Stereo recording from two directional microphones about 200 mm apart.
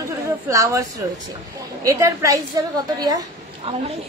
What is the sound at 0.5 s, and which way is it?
A woman's voice, 15° right (ahead or behind).